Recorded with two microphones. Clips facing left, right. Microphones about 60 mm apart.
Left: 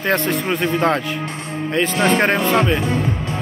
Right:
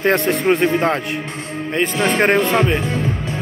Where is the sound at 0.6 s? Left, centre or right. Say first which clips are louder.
Right 1 dB; centre.